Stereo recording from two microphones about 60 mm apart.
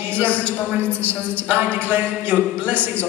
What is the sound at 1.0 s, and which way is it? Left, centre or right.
Speech, right.